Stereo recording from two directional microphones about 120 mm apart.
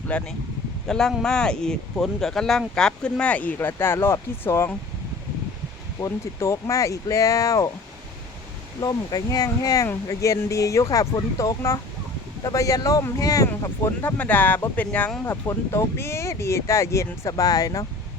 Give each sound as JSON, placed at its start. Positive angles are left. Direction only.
{"t": 0.1, "sound": "speech", "side_deg": 10}
{"t": 6.0, "sound": "speech", "side_deg": 25}
{"t": 8.8, "sound": "speech", "side_deg": 35}
{"t": 15.3, "sound": "speech", "side_deg": 25}